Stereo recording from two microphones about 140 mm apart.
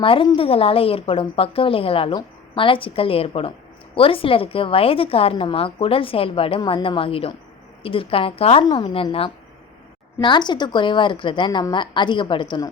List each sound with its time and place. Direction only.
0.0 s a woman's voice: 40° left (ahead or behind)